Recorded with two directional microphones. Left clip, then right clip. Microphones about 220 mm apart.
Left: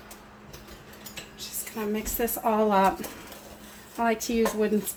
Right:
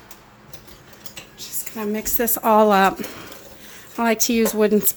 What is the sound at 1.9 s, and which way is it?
Speech, 50° right (ahead or behind).